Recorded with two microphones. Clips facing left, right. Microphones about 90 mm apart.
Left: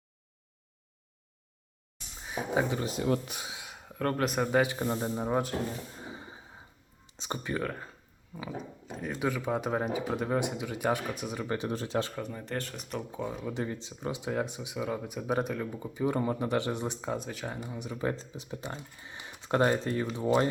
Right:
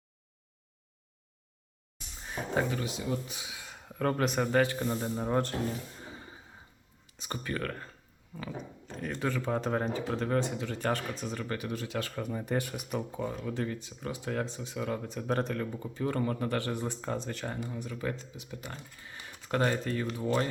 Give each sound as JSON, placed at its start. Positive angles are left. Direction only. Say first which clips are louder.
{"t": 2.1, "sound": "a sound", "louder": "left 2 dB", "side_deg": 5}
{"t": 3.0, "sound": "speech", "louder": "left 5 dB", "side_deg": 60}
{"t": 3.6, "sound": "speech", "louder": "right 1 dB", "side_deg": 5}
{"t": 4.6, "sound": "speech", "louder": "even", "side_deg": 15}
{"t": 6.0, "sound": "a sound", "louder": "left 3 dB", "side_deg": 15}
{"t": 7.2, "sound": "speech", "louder": "left 2 dB", "side_deg": 20}
{"t": 11.5, "sound": "speech", "louder": "left 6 dB", "side_deg": 30}
{"t": 12.1, "sound": "speech", "louder": "right 3 dB", "side_deg": -5}
{"t": 13.5, "sound": "speech", "louder": "even", "side_deg": 20}
{"t": 17.6, "sound": "speech", "louder": "left 2 dB", "side_deg": 15}